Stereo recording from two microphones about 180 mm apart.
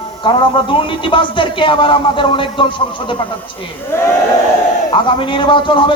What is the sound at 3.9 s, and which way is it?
Speech, 15° left (ahead or behind).